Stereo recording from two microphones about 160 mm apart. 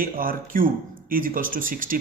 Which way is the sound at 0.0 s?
60° right (ahead or behind).